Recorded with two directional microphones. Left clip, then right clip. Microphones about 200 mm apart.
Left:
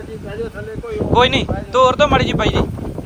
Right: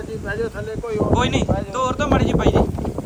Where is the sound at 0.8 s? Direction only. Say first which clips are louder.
Left 6 dB; 10° right (ahead or behind).